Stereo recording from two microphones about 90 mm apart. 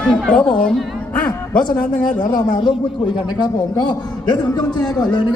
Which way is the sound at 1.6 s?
50° left (ahead or behind).